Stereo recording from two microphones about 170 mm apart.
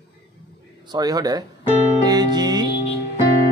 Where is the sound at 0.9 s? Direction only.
25° right (ahead or behind).